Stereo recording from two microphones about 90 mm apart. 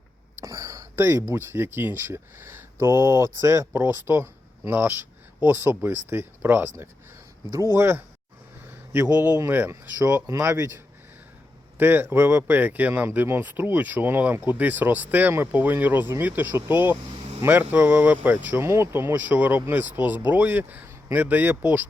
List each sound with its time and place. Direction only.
0.4 s a sound: 35° right (ahead or behind)
1.3 s speech: 25° right (ahead or behind)
9.1 s speech: 20° right (ahead or behind)
10.2 s speech: 35° right (ahead or behind)
11.8 s speech: 25° right (ahead or behind)
18.5 s speech: 30° right (ahead or behind)